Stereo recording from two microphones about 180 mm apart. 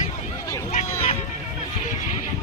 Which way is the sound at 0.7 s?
40° left (ahead or behind).